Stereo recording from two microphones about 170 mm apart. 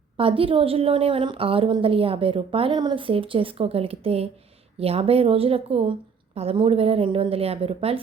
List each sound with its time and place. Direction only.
0.2 s a woman's voice: 30° right (ahead or behind)